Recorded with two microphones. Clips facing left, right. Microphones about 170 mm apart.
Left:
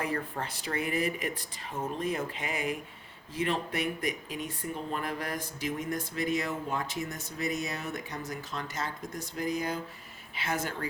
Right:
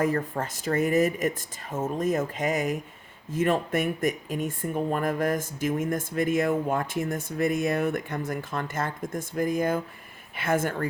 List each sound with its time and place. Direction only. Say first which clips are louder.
0.0 s speech: right 7 dB; 45° right (ahead or behind)